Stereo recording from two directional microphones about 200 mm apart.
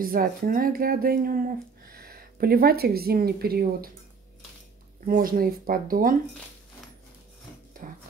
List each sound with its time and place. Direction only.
0.0 s speech: 45° right (ahead or behind)
5.0 s speech: 45° right (ahead or behind)
7.8 s music: 40° right (ahead or behind)